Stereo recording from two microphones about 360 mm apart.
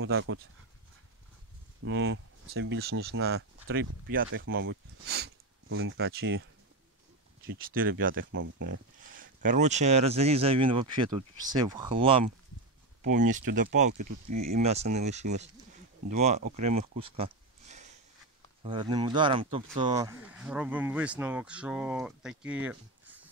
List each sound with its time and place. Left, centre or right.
0.0 s speech: right
1.9 s speech: right
7.4 s speech: right; by 23.2 s centre